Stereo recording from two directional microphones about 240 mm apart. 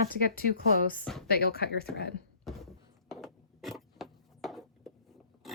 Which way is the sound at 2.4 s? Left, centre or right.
Centre.